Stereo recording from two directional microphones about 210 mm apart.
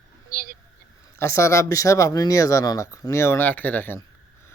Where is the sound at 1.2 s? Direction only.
15° left (ahead or behind).